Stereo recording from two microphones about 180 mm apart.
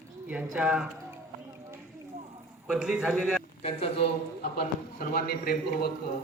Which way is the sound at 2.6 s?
5° right (ahead or behind).